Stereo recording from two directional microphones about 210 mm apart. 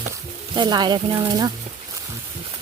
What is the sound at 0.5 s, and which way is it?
Speech, 20° right (ahead or behind).